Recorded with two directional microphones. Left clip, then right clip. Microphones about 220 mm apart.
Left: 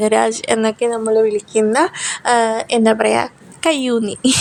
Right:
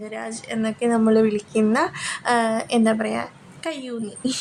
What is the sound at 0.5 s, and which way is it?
Speech, 25° left (ahead or behind).